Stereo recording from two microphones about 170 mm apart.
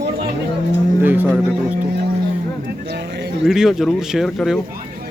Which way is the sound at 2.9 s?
75° right (ahead or behind).